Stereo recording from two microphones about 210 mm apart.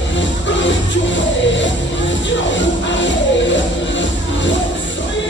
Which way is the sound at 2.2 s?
60° left (ahead or behind).